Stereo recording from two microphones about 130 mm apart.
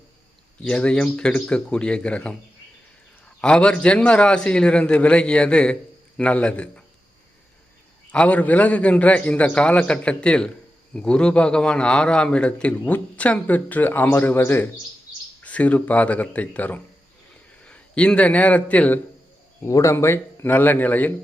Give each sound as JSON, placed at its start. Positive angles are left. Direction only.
{"t": 0.6, "sound": "a man's voice", "side_deg": 10}
{"t": 8.1, "sound": "a man's voice", "side_deg": 10}
{"t": 19.6, "sound": "a man's voice", "side_deg": 20}